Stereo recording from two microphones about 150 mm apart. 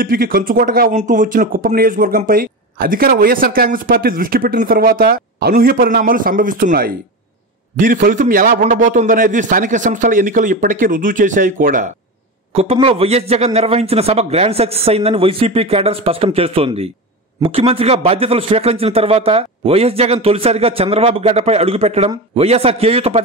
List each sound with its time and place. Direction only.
0.0 s a man's voice: 75° right (ahead or behind)
12.8 s speech: 40° right (ahead or behind)